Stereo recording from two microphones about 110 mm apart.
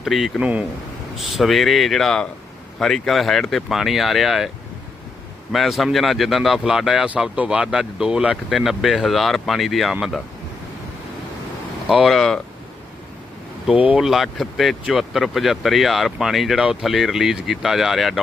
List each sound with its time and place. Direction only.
0.0 s speech: centre (ahead or behind)
11.9 s speech: 5° right (ahead or behind)
13.8 s speech: 5° right (ahead or behind)